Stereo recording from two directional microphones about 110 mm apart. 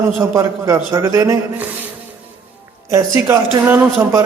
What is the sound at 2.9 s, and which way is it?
A man's voice, 25° right (ahead or behind).